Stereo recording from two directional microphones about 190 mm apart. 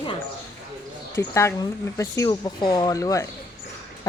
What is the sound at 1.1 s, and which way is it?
Speech, 15° left (ahead or behind).